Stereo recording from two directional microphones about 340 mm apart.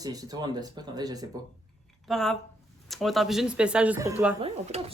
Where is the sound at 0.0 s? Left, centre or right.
Centre.